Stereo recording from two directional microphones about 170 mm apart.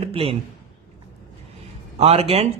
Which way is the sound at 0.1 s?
35° right (ahead or behind).